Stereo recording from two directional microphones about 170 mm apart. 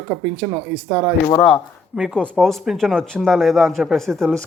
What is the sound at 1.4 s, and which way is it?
Speech, centre (ahead or behind).